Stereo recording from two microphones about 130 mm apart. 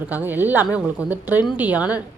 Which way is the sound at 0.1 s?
15° right (ahead or behind).